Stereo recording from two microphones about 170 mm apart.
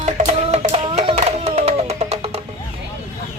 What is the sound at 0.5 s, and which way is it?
Music, 40° right (ahead or behind).